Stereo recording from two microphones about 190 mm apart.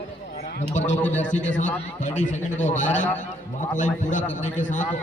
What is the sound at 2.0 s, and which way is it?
Speech, 40° left (ahead or behind).